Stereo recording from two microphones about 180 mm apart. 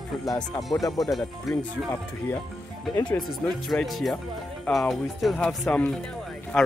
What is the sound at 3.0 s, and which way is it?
Speech, 5° left (ahead or behind).